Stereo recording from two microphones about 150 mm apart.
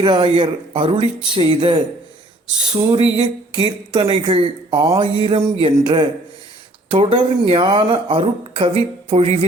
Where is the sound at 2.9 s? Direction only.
35° right (ahead or behind).